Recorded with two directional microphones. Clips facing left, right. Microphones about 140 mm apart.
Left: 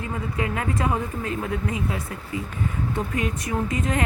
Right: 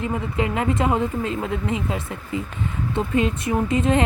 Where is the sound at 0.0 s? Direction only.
20° right (ahead or behind).